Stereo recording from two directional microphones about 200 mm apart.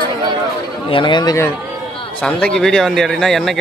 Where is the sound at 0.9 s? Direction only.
25° left (ahead or behind).